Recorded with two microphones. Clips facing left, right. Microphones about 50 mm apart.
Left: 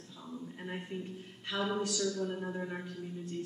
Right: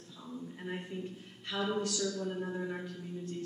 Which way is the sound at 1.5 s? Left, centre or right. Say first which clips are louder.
Even; centre.